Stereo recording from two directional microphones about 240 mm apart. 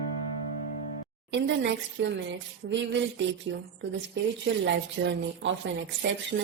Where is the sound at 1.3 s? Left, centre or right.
Right.